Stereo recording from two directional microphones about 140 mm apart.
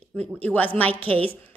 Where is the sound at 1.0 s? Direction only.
40° right (ahead or behind).